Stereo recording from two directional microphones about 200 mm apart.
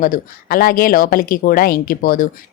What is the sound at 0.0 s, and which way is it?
Speech, 45° left (ahead or behind).